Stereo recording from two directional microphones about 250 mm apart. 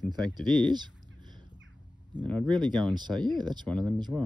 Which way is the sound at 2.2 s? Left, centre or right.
Centre.